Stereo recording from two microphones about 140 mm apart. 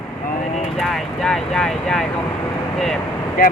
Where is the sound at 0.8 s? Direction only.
Centre (ahead or behind).